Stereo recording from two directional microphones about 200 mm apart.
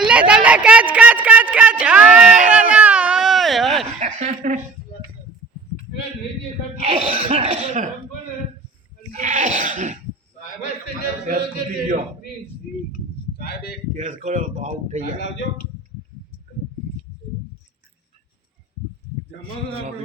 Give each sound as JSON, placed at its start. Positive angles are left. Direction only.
{"t": 0.0, "sound": "a sound", "side_deg": -5}
{"t": 4.0, "sound": "speech", "side_deg": -35}
{"t": 6.9, "sound": "speech", "side_deg": -25}
{"t": 9.1, "sound": "goat", "side_deg": -35}
{"t": 13.3, "sound": "a man's voice", "side_deg": 50}
{"t": 13.9, "sound": "speech", "side_deg": -40}